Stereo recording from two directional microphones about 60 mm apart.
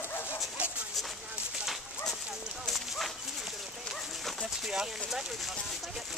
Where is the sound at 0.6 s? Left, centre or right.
Right.